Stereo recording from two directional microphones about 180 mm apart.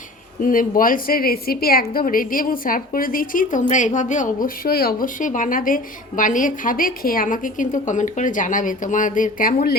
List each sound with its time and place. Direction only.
0.4 s a woman's voice: 50° left (ahead or behind)